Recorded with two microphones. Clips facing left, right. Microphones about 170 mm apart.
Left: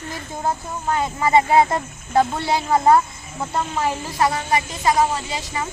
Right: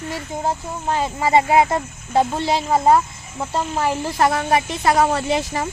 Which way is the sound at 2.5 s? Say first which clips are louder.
Even; 20° right (ahead or behind).